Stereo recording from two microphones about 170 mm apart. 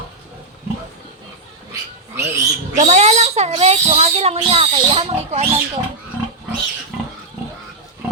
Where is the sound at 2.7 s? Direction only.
40° right (ahead or behind).